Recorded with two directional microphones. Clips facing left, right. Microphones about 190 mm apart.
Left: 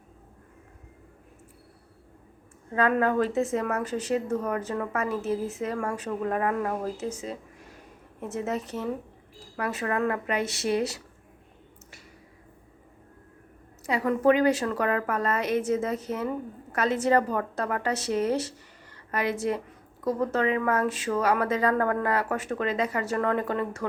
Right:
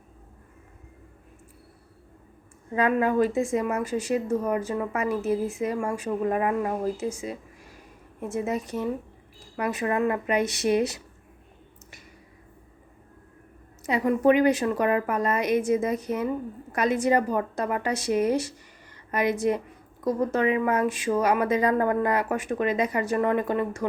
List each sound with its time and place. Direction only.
2.7 s a woman's voice: 15° right (ahead or behind)
13.8 s a woman's voice: 20° right (ahead or behind)